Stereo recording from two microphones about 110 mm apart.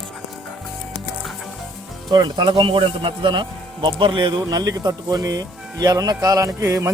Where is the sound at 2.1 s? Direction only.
40° right (ahead or behind).